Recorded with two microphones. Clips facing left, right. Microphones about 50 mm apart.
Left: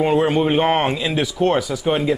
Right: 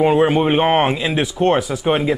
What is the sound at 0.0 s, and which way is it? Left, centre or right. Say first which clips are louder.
A man's voice: right 3 dB; centre.